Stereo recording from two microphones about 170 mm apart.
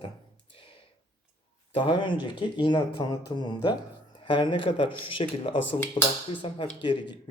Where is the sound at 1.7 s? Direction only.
30° left (ahead or behind).